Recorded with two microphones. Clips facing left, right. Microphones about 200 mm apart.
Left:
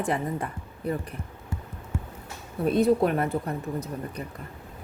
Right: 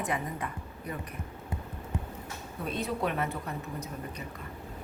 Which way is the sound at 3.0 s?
40° left (ahead or behind).